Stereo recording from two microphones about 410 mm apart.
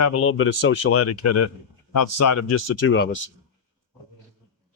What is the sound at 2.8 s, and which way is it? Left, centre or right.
Speech, left.